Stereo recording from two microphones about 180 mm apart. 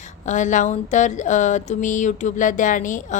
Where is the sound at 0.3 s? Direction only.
45° left (ahead or behind).